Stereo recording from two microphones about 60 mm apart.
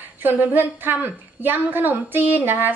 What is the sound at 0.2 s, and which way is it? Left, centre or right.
A woman's voice, right.